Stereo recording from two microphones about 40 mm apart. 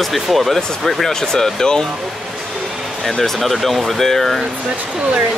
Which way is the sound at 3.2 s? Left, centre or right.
Centre.